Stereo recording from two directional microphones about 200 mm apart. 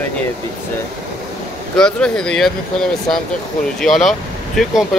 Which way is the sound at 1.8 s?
5° left (ahead or behind).